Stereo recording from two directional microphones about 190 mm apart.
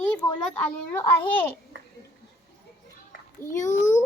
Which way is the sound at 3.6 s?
40° left (ahead or behind).